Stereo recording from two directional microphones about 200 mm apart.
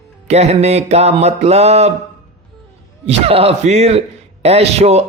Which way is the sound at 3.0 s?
30° right (ahead or behind).